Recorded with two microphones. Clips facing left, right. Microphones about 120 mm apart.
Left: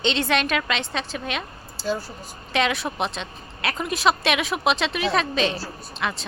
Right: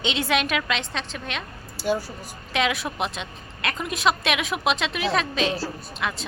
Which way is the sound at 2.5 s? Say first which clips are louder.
Left 1 dB; centre (ahead or behind).